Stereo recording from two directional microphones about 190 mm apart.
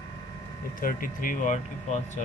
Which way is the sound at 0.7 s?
45° left (ahead or behind).